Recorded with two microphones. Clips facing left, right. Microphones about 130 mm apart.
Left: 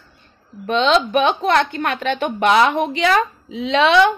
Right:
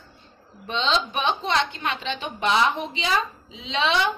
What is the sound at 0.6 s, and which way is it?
A woman's voice, 60° left (ahead or behind).